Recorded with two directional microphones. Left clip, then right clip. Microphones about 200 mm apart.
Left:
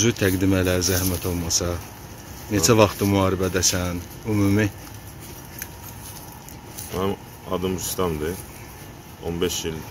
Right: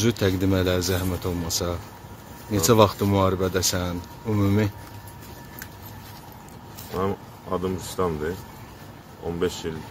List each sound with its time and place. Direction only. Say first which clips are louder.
0.0 s speech: left 2 dB; 5° right (ahead or behind)
7.0 s speech: left 1 dB; 5° right (ahead or behind)
9.4 s speech: left 2 dB; 5° right (ahead or behind)